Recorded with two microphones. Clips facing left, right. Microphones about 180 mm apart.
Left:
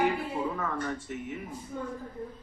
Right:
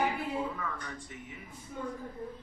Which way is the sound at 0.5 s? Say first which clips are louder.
Left 5 dB; 50° left (ahead or behind).